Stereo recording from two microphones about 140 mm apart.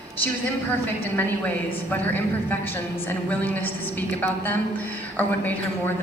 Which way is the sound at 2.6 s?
15° left (ahead or behind).